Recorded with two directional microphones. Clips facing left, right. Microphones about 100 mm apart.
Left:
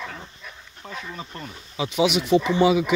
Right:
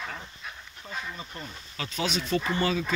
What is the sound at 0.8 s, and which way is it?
Speech, 90° left.